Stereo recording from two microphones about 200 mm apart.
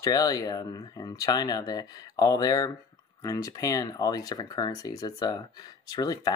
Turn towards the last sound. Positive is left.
turn(degrees=20)  # may be behind; listen again after turning